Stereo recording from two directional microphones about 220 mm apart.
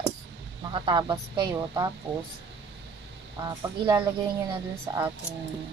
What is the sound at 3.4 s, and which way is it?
Speech, 20° right (ahead or behind).